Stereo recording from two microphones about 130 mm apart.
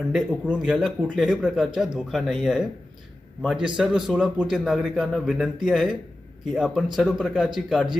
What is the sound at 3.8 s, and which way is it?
A man's voice, 5° right (ahead or behind).